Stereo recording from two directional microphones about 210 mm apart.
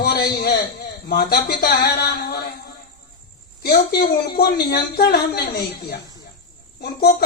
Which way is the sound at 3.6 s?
50° left (ahead or behind).